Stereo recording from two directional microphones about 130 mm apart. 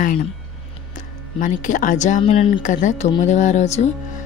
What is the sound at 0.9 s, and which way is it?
Speech, 80° left.